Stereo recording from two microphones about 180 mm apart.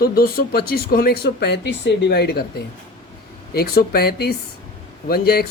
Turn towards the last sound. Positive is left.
turn(degrees=60)  # may be behind; listen again after turning